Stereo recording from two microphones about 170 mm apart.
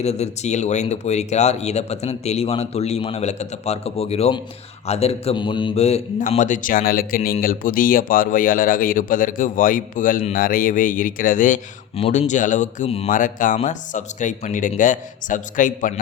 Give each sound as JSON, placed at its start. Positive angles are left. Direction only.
{"t": 0.0, "sound": "a man's voice", "side_deg": 40}
{"t": 11.9, "sound": "a man's voice", "side_deg": 40}
{"t": 13.1, "sound": "a man's voice", "side_deg": 50}